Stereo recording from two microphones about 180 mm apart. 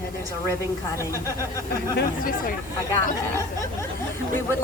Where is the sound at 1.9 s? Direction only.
50° left (ahead or behind).